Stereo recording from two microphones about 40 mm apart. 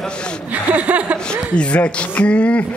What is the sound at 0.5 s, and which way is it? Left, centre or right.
Speech, right.